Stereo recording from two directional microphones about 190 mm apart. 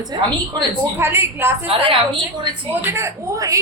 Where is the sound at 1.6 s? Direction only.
25° right (ahead or behind).